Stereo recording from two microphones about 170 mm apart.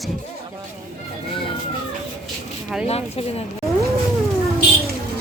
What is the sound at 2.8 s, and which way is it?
Speech, 35° left (ahead or behind).